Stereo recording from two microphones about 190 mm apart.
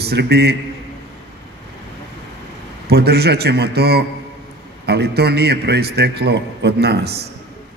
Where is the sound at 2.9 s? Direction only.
55° right (ahead or behind).